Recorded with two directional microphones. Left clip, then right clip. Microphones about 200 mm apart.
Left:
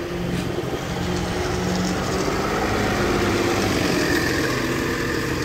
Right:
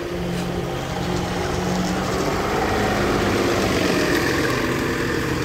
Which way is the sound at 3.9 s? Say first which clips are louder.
Right 1 dB; 15° left (ahead or behind).